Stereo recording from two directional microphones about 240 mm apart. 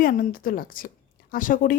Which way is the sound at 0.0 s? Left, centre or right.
Left.